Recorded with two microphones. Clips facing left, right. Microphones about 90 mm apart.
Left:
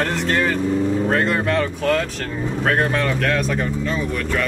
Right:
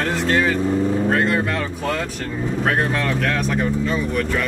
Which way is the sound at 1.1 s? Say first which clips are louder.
Even; centre (ahead or behind).